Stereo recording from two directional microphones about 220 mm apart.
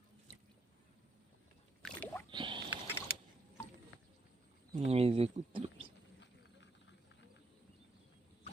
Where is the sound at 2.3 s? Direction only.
20° right (ahead or behind).